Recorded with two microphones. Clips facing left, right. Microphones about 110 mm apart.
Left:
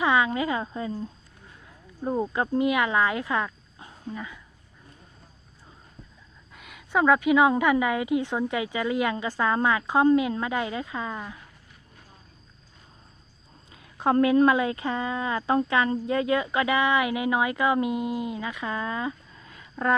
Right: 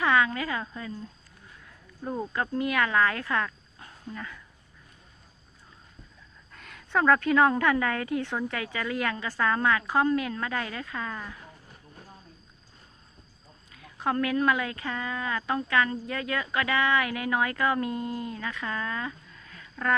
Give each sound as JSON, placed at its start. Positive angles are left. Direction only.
{"t": 0.0, "sound": "speech", "side_deg": 15}
{"t": 6.5, "sound": "a woman's voice", "side_deg": 10}
{"t": 13.7, "sound": "speech", "side_deg": 25}